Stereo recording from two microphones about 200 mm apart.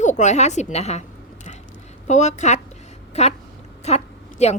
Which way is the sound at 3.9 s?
35° left (ahead or behind).